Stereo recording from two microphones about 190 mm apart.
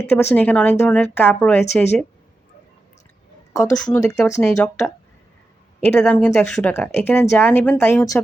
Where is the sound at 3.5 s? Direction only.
15° left (ahead or behind).